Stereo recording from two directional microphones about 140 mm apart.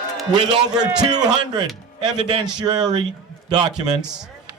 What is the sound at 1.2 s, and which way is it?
A man's voice, 30° right (ahead or behind).